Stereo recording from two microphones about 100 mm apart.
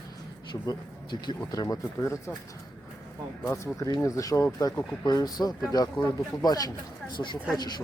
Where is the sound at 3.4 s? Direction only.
25° left (ahead or behind).